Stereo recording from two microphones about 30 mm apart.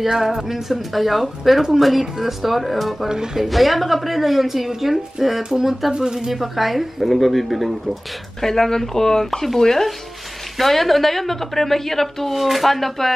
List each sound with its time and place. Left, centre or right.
0.0 s speech: centre
3.1 s speech: right
3.4 s speech: centre; by 6.3 s right
6.3 s speech: centre
8.4 s a woman's voice: centre
12.3 s speech: centre